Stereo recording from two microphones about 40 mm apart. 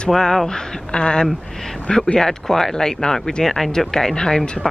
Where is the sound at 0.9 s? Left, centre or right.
Left.